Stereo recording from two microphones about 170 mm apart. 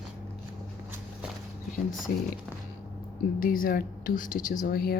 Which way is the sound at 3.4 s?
55° left (ahead or behind).